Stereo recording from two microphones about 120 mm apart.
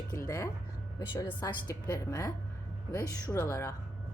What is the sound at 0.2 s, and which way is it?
Speech, 25° left (ahead or behind).